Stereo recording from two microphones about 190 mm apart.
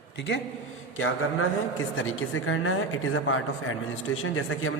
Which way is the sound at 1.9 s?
90° left.